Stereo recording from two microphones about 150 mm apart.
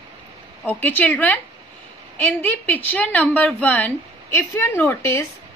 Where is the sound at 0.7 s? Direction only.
10° left (ahead or behind).